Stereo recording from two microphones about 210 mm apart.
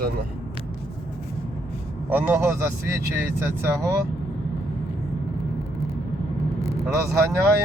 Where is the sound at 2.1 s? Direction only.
10° right (ahead or behind).